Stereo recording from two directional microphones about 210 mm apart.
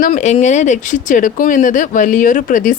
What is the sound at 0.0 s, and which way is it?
Speech, 30° left (ahead or behind).